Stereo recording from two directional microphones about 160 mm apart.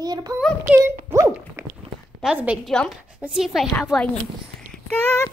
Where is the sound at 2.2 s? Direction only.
5° right (ahead or behind).